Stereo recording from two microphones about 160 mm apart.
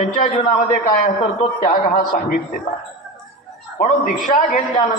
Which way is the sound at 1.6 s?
55° left (ahead or behind).